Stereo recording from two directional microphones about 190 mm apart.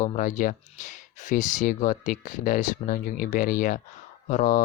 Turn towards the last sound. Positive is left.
turn(degrees=40)  # may be behind; listen again after turning